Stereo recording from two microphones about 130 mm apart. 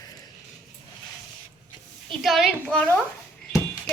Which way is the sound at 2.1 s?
Centre (ahead or behind).